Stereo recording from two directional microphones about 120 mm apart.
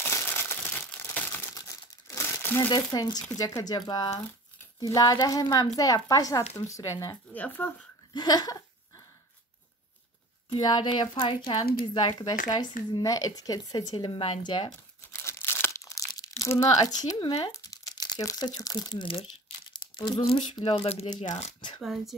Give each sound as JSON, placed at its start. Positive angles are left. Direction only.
{"t": 0.0, "sound": "crumpling", "side_deg": 20}
{"t": 1.5, "sound": "crumpling", "side_deg": 30}
{"t": 2.7, "sound": "speech", "side_deg": 35}
{"t": 7.3, "sound": "speech", "side_deg": 15}
{"t": 8.1, "sound": "speech", "side_deg": 35}
{"t": 10.6, "sound": "speech", "side_deg": 40}
{"t": 13.9, "sound": "speech", "side_deg": 45}
{"t": 15.2, "sound": "crumpling", "side_deg": 20}
{"t": 17.2, "sound": "speech", "side_deg": 40}
{"t": 21.5, "sound": "speech", "side_deg": 40}
{"t": 21.8, "sound": "speech", "side_deg": 0}